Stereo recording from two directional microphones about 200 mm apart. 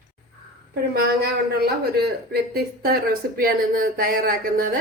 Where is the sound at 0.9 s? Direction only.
55° right (ahead or behind).